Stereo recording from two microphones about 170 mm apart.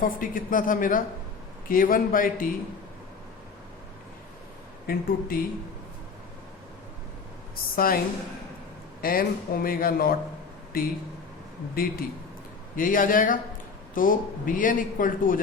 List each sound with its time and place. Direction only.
0.0 s speech: 55° left (ahead or behind)
4.9 s speech: 55° left (ahead or behind)
7.5 s a woman's voice: 60° left (ahead or behind)
9.0 s speech: 60° left (ahead or behind)